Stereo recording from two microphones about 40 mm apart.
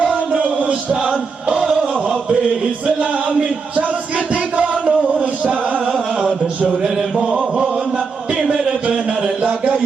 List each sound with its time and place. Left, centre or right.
0.0 s music: right
1.0 s music: right
2.8 s music: right
6.8 s chant: centre
7.5 s chant: right
8.4 s a sound: centre